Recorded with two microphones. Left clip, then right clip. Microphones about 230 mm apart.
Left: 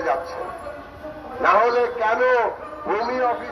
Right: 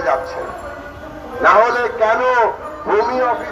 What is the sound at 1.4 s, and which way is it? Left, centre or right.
A man's voice, left.